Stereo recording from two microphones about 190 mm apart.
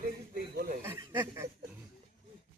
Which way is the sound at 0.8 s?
15° right (ahead or behind).